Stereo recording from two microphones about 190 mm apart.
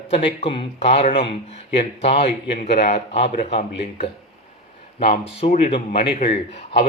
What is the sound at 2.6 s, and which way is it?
Speech, 60° left (ahead or behind).